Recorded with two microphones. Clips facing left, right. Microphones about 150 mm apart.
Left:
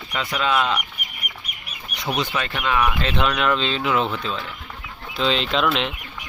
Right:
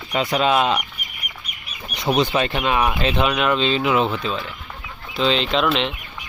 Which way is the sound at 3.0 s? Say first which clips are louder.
Right 2 dB; 10° right (ahead or behind).